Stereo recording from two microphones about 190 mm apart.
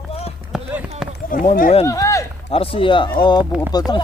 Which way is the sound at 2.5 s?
30° left (ahead or behind).